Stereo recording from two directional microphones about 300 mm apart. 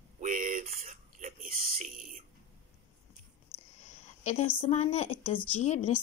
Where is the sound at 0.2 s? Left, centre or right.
Right.